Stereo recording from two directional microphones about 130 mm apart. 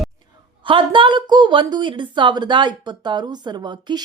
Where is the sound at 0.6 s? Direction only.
40° right (ahead or behind).